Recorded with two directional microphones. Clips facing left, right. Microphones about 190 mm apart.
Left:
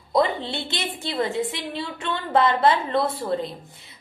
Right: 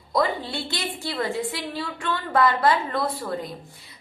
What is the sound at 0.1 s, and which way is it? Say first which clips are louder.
A woman's voice: left 2 dB; 25° left (ahead or behind).